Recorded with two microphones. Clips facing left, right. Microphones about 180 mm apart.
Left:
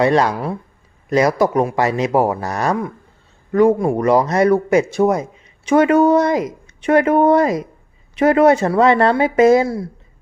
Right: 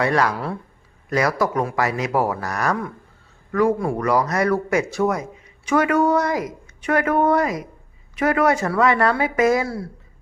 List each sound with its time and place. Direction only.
0.0 s speech: 25° left (ahead or behind)